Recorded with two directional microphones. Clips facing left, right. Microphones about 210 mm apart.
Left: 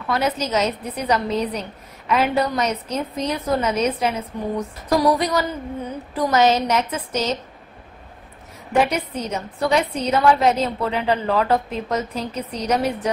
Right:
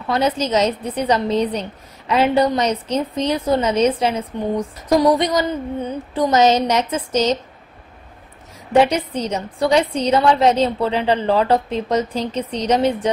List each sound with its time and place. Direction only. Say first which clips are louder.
0.1 s a woman's voice: right 3 dB; 30° right (ahead or behind)
8.7 s a woman's voice: right 4 dB; 30° right (ahead or behind)